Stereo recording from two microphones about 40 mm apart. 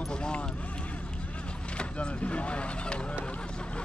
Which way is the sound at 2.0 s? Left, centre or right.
Left.